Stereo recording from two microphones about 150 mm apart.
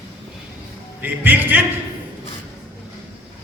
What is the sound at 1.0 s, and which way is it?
Speech, 10° right (ahead or behind).